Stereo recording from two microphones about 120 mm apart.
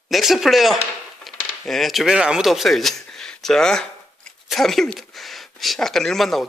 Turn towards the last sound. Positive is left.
turn(degrees=0)  # may be behind; listen again after turning